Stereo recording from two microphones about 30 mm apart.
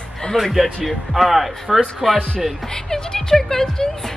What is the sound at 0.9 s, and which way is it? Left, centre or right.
A man's voice, centre.